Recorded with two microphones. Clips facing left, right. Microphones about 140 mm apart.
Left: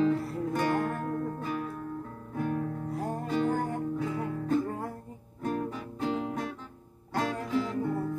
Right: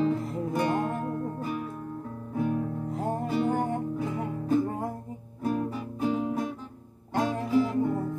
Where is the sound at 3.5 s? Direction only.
25° right (ahead or behind).